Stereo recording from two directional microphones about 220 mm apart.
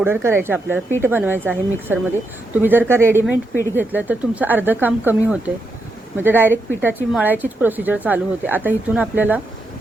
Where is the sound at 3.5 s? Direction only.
15° left (ahead or behind).